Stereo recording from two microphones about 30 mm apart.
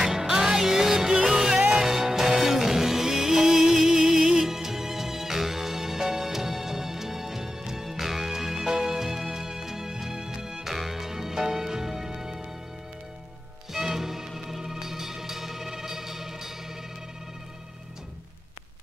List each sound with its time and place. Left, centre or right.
0.0 s music: centre
13.7 s music: centre